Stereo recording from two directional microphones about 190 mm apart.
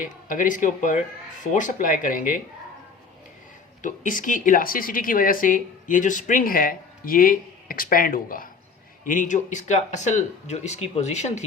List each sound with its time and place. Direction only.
0.0 s a woman's voice: 45° left (ahead or behind)
3.8 s a woman's voice: 45° left (ahead or behind)